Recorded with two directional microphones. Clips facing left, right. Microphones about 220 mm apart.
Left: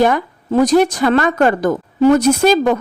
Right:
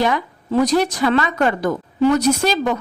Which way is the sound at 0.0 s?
50° left (ahead or behind).